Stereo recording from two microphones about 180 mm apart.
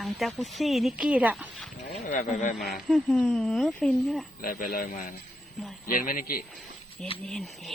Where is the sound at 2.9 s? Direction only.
5° left (ahead or behind).